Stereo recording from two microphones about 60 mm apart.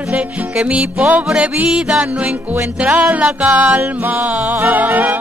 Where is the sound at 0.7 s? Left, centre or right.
Right.